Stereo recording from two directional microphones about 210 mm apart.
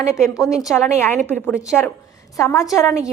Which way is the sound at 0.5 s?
Centre (ahead or behind).